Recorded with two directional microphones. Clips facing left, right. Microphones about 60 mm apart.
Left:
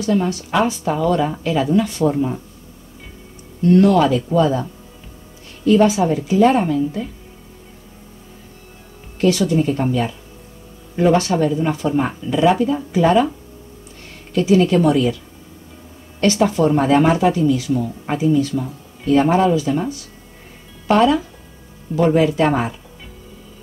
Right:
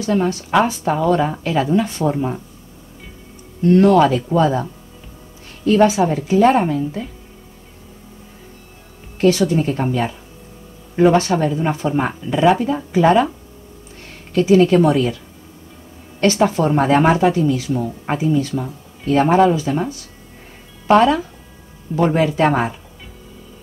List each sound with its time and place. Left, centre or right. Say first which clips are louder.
0.0 s a woman's voice: even; right
3.7 s speech: right 1 dB; right
5.9 s speech: even; right
9.8 s speech: even; right
14.4 s speech: right 2 dB; right
16.2 s a woman's voice: even; right